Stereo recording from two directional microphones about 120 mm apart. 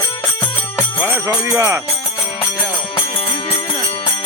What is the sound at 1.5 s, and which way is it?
Speech, 25° right (ahead or behind).